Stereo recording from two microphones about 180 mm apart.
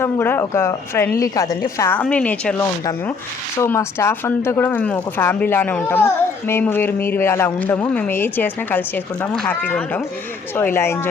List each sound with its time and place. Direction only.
0.0 s speech: 10° left (ahead or behind)